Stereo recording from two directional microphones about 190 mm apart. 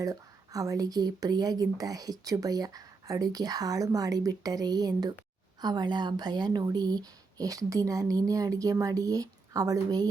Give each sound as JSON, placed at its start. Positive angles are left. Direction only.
{"t": 0.0, "sound": "speech", "side_deg": -20}